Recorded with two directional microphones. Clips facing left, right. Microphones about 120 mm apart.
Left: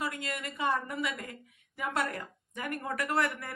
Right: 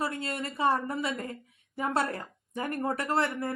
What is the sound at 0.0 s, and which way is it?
A woman's voice, 35° right (ahead or behind).